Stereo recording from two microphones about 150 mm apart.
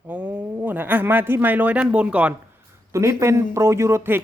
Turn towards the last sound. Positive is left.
turn(degrees=-15)  # may be behind; listen again after turning